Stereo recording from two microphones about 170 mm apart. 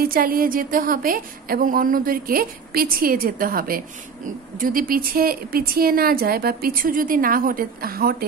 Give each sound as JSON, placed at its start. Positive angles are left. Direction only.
{"t": 0.0, "sound": "a woman's voice", "side_deg": -60}